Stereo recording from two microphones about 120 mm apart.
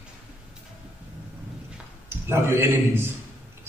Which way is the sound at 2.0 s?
20° right (ahead or behind).